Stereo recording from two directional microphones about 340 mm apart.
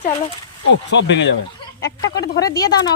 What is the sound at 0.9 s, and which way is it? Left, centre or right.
Speech, left.